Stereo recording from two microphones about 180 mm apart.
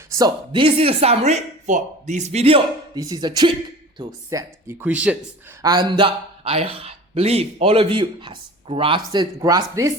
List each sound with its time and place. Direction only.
0.1 s speech: 25° right (ahead or behind)
2.9 s speech: 20° right (ahead or behind)
5.6 s speech: 25° right (ahead or behind)